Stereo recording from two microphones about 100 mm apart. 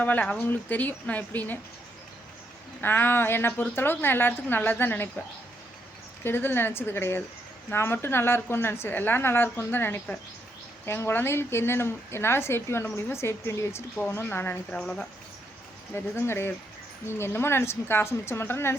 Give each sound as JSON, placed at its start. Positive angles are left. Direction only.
{"t": 0.0, "sound": "speech", "side_deg": 15}
{"t": 2.8, "sound": "speech", "side_deg": 20}
{"t": 6.2, "sound": "speech", "side_deg": 20}
{"t": 14.7, "sound": "speech", "side_deg": 10}
{"t": 16.0, "sound": "speech", "side_deg": 25}